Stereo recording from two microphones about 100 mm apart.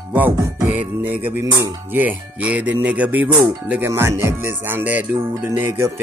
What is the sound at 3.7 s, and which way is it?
Music, 25° right (ahead or behind).